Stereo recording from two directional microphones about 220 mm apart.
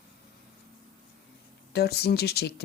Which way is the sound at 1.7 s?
45° left (ahead or behind).